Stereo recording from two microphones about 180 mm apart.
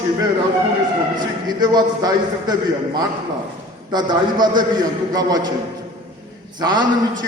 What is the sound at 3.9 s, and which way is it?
A man's voice, 25° right (ahead or behind).